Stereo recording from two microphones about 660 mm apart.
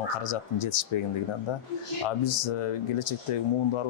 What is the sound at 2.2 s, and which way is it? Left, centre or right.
Speech, left.